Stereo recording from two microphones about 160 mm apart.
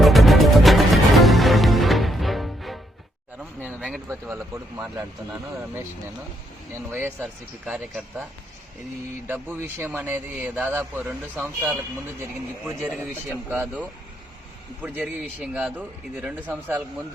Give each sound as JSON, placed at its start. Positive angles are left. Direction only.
{"t": 0.0, "sound": "music", "side_deg": 0}
{"t": 4.1, "sound": "a man's voice", "side_deg": -15}
{"t": 6.9, "sound": "a man's voice", "side_deg": -10}
{"t": 9.2, "sound": "a man's voice", "side_deg": -15}